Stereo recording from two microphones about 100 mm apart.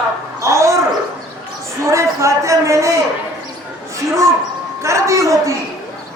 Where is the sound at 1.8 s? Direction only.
30° right (ahead or behind).